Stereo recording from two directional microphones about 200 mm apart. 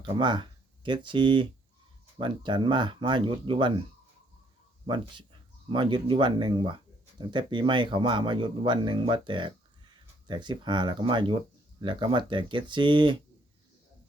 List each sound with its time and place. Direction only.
0.0 s speech: 25° right (ahead or behind)
4.9 s speech: 25° right (ahead or behind)